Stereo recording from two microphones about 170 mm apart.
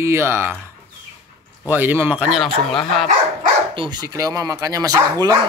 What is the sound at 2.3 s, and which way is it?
Speech, centre (ahead or behind).